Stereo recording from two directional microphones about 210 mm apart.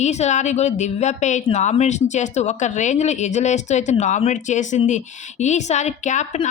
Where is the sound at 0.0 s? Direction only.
35° left (ahead or behind).